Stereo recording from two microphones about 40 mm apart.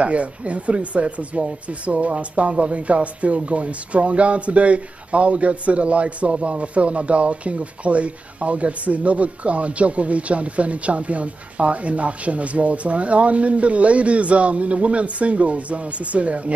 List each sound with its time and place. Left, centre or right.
0.0 s speech: right